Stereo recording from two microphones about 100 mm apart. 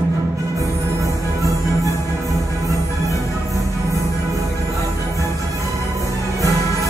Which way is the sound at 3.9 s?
30° right (ahead or behind).